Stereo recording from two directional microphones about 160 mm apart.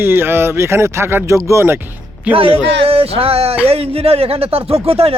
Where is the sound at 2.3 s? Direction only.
35° right (ahead or behind).